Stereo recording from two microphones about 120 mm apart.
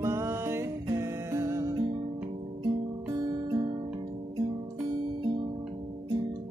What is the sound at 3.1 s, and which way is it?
Music, 35° right (ahead or behind).